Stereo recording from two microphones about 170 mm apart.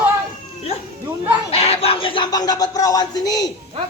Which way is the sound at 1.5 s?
35° left (ahead or behind).